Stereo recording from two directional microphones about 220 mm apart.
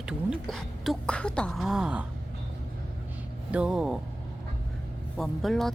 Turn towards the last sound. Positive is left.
turn(degrees=0)  # may be behind; listen again after turning